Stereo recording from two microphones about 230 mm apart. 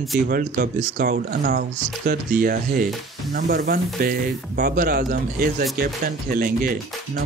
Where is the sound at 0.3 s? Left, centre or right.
Right.